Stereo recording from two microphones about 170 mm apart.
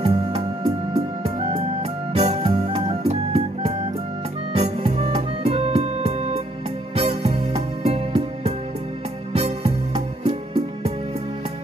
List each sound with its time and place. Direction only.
0.0 s music: 30° right (ahead or behind)